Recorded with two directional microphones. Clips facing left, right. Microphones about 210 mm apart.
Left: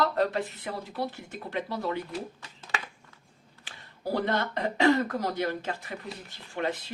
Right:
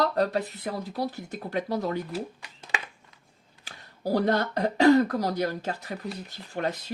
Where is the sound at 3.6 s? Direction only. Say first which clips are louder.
Right 3 dB; 40° right (ahead or behind).